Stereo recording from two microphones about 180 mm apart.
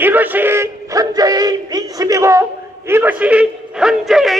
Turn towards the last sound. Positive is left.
turn(degrees=0)  # may be behind; listen again after turning